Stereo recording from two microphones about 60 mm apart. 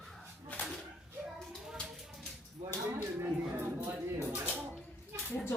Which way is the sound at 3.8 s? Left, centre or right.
Right.